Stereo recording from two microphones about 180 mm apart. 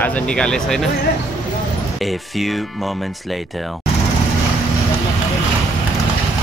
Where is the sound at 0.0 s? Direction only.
5° left (ahead or behind).